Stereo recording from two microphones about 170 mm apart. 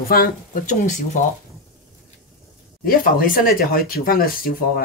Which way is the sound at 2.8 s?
60° left (ahead or behind).